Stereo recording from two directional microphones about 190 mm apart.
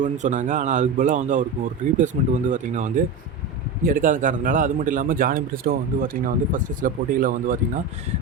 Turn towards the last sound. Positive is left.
turn(degrees=-45)  # may be behind; listen again after turning